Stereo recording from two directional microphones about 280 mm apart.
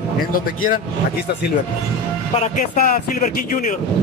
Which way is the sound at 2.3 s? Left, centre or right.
Left.